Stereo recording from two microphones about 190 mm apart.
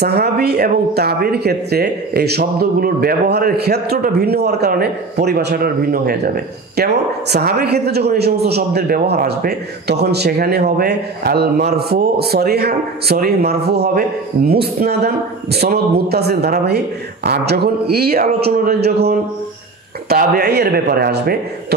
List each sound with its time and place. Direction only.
0.0 s speech: 55° right (ahead or behind)